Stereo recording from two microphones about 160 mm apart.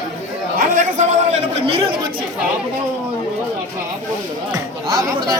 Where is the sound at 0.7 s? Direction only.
55° right (ahead or behind).